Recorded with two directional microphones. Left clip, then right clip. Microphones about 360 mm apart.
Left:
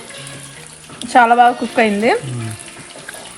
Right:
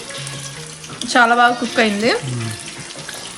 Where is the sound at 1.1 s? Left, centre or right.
Centre.